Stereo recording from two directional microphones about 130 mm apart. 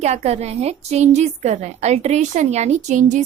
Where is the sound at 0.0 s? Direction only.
60° right (ahead or behind).